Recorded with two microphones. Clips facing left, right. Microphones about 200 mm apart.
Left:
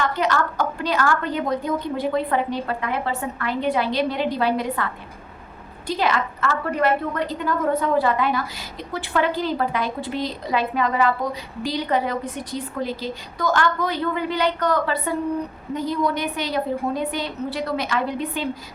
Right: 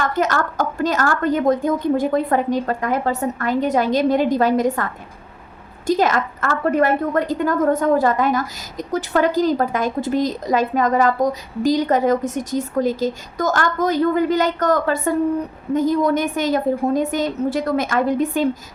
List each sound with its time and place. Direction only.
0.0 s a woman's voice: 45° right (ahead or behind)
5.9 s a woman's voice: 45° right (ahead or behind)